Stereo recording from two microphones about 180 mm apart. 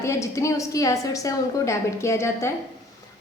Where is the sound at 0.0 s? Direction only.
15° left (ahead or behind).